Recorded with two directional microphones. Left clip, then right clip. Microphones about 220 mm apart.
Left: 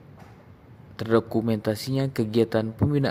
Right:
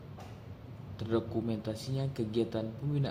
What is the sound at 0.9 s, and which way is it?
Speech, 40° left (ahead or behind).